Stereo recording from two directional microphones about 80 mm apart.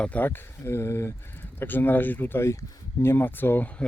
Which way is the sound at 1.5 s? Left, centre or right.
Left.